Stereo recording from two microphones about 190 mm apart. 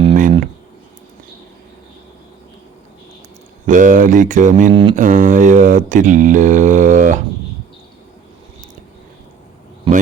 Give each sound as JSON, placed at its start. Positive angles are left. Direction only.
{"t": 0.0, "sound": "a sound", "side_deg": -40}
{"t": 3.7, "sound": "mantra", "side_deg": -45}
{"t": 4.7, "sound": "mantra", "side_deg": -25}
{"t": 4.9, "sound": "mantra", "side_deg": -40}